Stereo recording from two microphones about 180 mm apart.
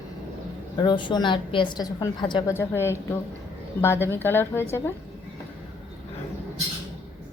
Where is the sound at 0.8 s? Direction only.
25° left (ahead or behind).